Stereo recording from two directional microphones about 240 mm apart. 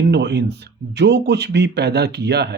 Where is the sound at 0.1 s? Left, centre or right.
Right.